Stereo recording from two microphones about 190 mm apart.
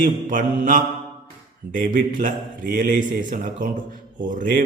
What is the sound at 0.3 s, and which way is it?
Mantra, 45° right (ahead or behind).